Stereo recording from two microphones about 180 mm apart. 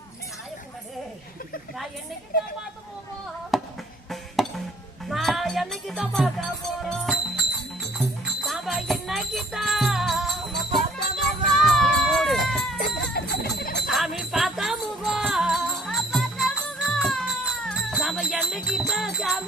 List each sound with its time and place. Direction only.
3.5 s music: centre (ahead or behind)
5.0 s speech: centre (ahead or behind)
6.8 s music: centre (ahead or behind)
13.2 s jingle bell: 60° left (ahead or behind)
13.8 s jingle bell: centre (ahead or behind)